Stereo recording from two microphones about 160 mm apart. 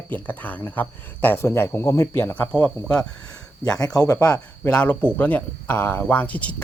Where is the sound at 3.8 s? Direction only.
25° left (ahead or behind).